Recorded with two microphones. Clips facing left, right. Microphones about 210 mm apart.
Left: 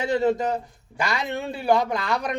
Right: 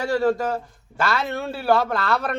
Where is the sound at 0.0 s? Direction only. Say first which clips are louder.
Right 1 dB; 20° left (ahead or behind).